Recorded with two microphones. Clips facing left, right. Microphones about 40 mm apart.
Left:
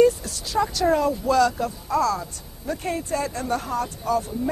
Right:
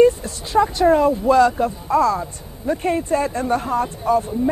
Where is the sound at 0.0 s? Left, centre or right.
Right.